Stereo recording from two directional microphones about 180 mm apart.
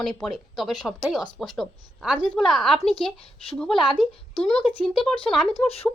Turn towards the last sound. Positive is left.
turn(degrees=35)  # may be behind; listen again after turning